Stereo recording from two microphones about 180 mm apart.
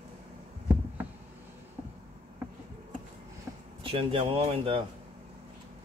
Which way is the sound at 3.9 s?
30° right (ahead or behind).